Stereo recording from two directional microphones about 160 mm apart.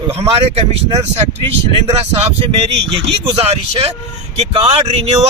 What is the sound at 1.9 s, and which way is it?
Speech, 40° right (ahead or behind).